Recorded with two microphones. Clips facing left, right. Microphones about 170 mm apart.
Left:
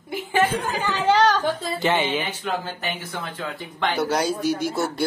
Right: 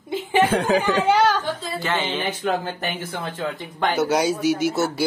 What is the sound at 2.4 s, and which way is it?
Speech, 45° right (ahead or behind).